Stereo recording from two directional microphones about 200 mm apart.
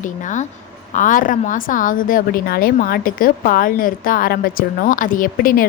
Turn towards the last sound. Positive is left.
turn(degrees=45)  # may be behind; listen again after turning